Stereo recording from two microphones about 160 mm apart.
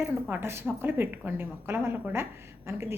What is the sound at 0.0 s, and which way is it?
A woman's voice, 15° right (ahead or behind).